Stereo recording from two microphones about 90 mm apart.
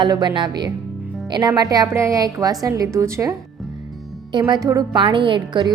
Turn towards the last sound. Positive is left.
turn(degrees=-60)  # may be behind; listen again after turning